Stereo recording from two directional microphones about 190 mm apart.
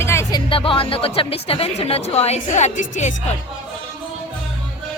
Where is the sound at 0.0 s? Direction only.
15° left (ahead or behind); by 3.1 s 40° left (ahead or behind).